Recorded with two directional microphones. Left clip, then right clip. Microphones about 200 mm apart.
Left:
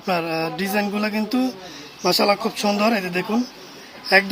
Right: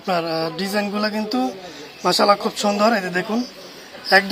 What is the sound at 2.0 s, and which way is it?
Speech, 15° left (ahead or behind).